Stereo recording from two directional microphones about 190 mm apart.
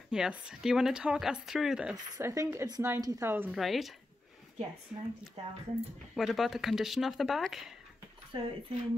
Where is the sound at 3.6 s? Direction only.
Centre (ahead or behind).